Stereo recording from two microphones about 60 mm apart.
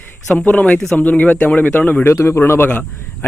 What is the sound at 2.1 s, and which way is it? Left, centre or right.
A man's voice, left.